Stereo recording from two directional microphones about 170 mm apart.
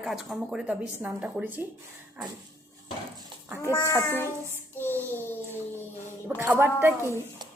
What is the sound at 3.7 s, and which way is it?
Child singing, 15° left (ahead or behind).